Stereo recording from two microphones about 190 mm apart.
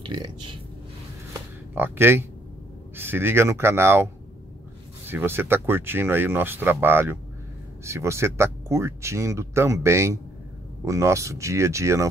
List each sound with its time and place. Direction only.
0.0 s speech: 25° right (ahead or behind)
1.8 s speech: 10° right (ahead or behind)